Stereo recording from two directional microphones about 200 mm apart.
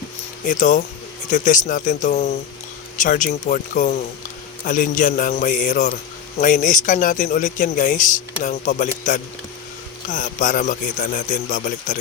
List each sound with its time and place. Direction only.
0.4 s speech: 40° left (ahead or behind)